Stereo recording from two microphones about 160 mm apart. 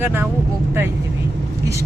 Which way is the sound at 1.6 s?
20° right (ahead or behind).